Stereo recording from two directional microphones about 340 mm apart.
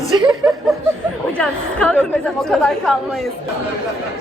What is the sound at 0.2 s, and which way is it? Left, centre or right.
Speech, centre.